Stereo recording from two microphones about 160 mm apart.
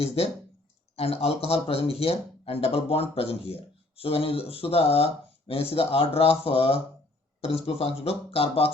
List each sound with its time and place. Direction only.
0.9 s speech: 40° left (ahead or behind)